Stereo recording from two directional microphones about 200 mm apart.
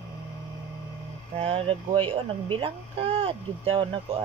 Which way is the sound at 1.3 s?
30° right (ahead or behind).